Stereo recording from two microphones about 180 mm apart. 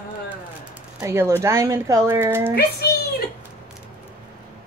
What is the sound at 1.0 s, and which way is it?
Speech, 15° right (ahead or behind).